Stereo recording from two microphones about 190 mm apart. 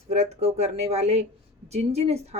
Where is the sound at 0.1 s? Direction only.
35° right (ahead or behind).